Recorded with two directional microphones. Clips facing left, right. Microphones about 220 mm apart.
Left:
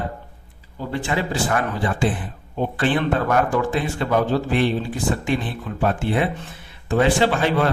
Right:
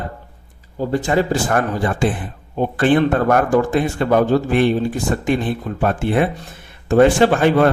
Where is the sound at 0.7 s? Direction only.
40° right (ahead or behind).